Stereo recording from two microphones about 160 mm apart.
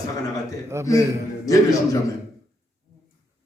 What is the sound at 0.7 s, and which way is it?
Speech, 15° right (ahead or behind).